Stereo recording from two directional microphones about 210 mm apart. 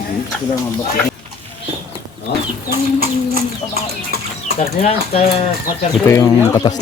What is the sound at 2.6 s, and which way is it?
Bird, 45° right (ahead or behind).